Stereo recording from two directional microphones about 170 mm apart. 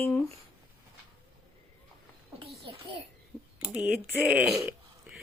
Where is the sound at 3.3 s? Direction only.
5° left (ahead or behind).